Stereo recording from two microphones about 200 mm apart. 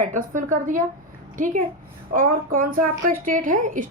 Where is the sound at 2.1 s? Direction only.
45° right (ahead or behind).